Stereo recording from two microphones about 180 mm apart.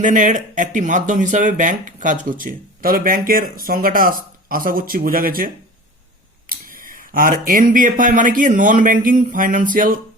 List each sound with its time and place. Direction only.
0.0 s speech: 45° right (ahead or behind)
6.5 s speech: 50° right (ahead or behind)